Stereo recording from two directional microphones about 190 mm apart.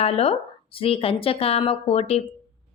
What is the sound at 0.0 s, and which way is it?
A woman's voice, 30° left (ahead or behind).